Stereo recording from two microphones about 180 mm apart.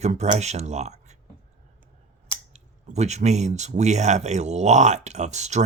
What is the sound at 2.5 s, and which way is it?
Speech, 40° right (ahead or behind).